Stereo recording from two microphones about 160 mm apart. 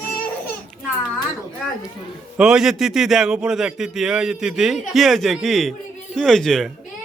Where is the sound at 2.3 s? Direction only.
5° right (ahead or behind).